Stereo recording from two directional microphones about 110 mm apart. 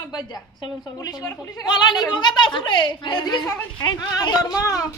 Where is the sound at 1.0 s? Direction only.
35° left (ahead or behind).